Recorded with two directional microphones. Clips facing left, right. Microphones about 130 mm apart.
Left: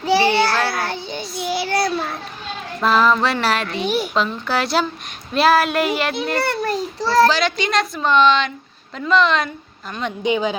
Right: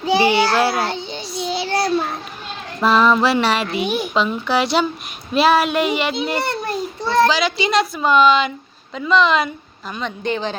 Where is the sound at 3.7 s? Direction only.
15° right (ahead or behind).